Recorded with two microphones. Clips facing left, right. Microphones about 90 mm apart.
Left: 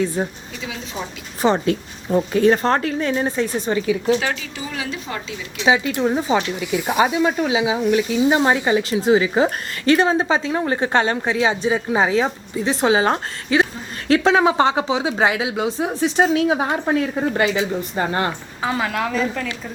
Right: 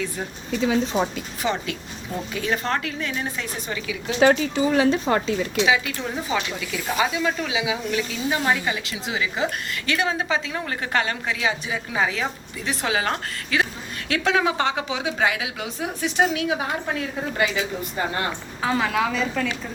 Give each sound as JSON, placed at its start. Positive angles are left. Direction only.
{"t": 0.2, "sound": "a woman's voice", "side_deg": 40}
{"t": 0.9, "sound": "a woman's voice", "side_deg": -90}
{"t": 1.4, "sound": "a woman's voice", "side_deg": 35}
{"t": 4.2, "sound": "speech", "side_deg": -30}
{"t": 5.6, "sound": "a woman's voice", "side_deg": 30}
{"t": 17.9, "sound": "a woman's voice", "side_deg": 35}
{"t": 18.6, "sound": "a woman's voice", "side_deg": 0}